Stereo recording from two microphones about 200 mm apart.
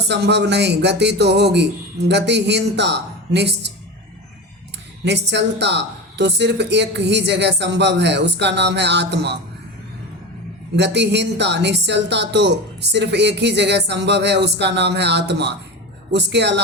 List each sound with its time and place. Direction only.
0.1 s speech: 60° right (ahead or behind)
5.0 s speech: 60° right (ahead or behind)
10.8 s speech: 60° right (ahead or behind)